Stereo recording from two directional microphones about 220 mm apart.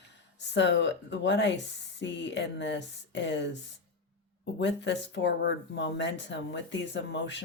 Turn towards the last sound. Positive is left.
turn(degrees=55)  # may be behind; listen again after turning